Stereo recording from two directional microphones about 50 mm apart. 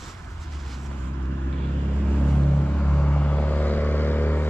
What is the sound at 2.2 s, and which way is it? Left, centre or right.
Vehicle, left.